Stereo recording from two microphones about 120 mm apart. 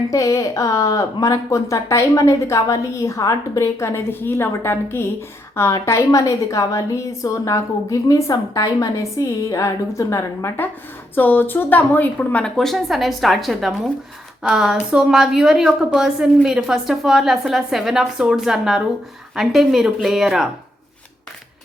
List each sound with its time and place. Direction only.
0.1 s a woman's voice: 25° left (ahead or behind); by 20.5 s 5° right (ahead or behind)